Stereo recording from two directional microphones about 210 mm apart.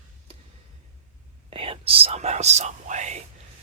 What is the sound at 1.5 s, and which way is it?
Speech, 25° right (ahead or behind).